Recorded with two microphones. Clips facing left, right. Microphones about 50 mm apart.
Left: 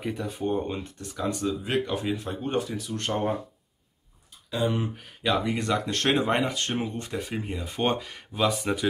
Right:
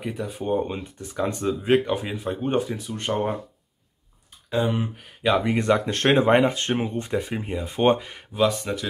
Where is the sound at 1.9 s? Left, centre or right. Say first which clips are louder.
Right 1 dB; centre.